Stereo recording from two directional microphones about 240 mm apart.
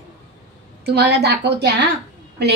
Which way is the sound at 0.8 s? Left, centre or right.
Right.